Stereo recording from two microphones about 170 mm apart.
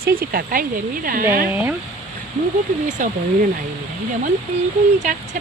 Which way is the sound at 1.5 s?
10° right (ahead or behind).